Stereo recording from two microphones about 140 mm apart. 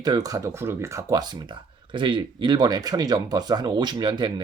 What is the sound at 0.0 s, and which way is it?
Speech, 25° right (ahead or behind).